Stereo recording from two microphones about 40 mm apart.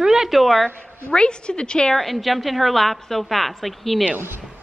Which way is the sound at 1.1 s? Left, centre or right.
Left.